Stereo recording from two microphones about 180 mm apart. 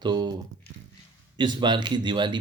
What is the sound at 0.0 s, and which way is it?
Speech, 25° right (ahead or behind).